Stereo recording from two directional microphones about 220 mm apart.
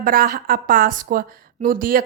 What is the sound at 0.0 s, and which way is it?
Speech, 40° right (ahead or behind).